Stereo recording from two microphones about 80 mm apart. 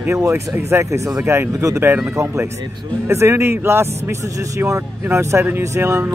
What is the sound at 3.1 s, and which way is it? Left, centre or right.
Speech, right.